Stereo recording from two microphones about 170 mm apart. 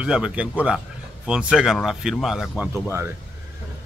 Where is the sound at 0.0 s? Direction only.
5° right (ahead or behind).